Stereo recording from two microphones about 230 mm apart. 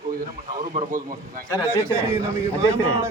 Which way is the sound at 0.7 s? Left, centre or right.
Right.